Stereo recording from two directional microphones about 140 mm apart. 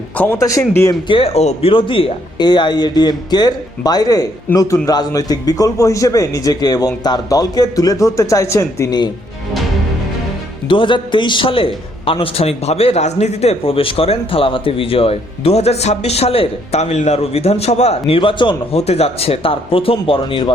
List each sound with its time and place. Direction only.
0.2 s a man's voice: 20° left (ahead or behind)
1.0 s a man's voice: 40° left (ahead or behind)
10.7 s a man's voice: 35° left (ahead or behind)
18.1 s speech: 40° left (ahead or behind)
18.8 s speech: 50° left (ahead or behind)